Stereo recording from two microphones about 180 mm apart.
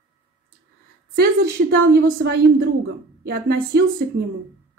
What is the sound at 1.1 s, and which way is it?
A woman's voice, 60° right (ahead or behind).